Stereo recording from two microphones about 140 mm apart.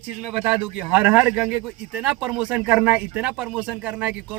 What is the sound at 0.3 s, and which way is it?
Speech, 5° right (ahead or behind).